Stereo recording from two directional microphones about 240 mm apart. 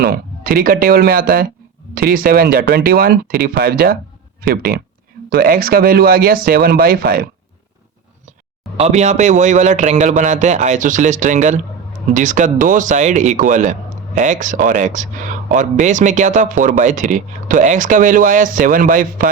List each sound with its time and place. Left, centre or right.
0.0 s speech: right
8.8 s speech: right